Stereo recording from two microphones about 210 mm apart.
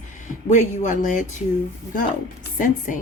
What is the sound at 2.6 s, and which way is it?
Speech, 40° left (ahead or behind).